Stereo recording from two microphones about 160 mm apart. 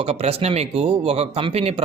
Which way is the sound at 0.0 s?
40° right (ahead or behind).